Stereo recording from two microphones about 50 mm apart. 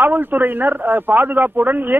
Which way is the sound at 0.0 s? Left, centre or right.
Right.